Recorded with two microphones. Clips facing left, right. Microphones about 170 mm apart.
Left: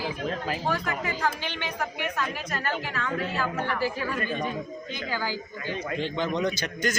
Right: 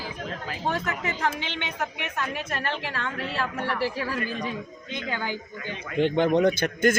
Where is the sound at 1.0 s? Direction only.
25° right (ahead or behind).